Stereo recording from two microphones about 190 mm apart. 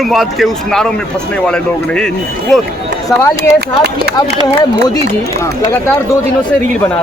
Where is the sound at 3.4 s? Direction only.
55° right (ahead or behind).